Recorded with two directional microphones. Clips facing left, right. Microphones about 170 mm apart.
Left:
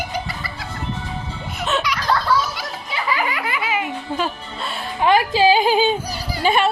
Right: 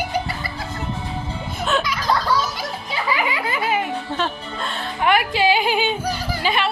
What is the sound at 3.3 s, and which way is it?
Speech, 35° right (ahead or behind).